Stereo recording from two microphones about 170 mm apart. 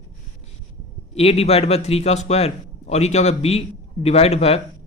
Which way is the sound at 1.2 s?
35° left (ahead or behind).